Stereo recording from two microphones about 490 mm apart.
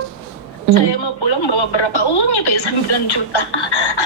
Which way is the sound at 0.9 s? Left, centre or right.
Left.